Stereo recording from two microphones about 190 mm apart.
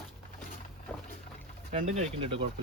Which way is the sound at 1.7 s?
40° right (ahead or behind).